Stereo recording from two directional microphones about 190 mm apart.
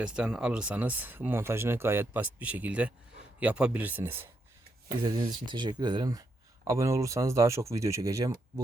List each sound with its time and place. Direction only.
0.0 s speech: 5° right (ahead or behind)
5.0 s speech: 25° right (ahead or behind)